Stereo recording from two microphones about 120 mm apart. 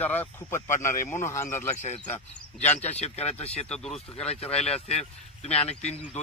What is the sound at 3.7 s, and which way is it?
Speech, 5° left (ahead or behind).